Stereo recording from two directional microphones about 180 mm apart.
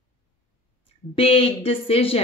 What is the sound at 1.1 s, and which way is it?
Speech, 30° left (ahead or behind).